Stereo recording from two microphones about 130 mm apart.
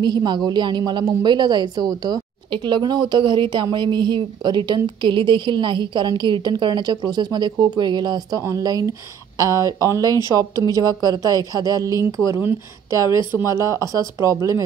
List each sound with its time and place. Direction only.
0.0 s a woman's voice: 35° right (ahead or behind)